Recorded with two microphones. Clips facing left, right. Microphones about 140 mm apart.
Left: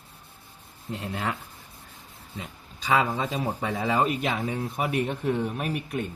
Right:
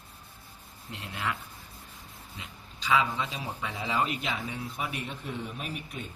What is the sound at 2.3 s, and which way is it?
A man's voice, 50° left (ahead or behind).